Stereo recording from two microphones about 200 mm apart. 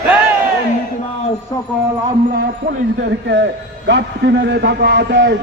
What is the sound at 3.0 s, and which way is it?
A man's voice, 60° right (ahead or behind).